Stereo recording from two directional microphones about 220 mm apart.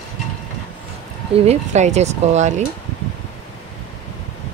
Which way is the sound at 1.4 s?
30° right (ahead or behind).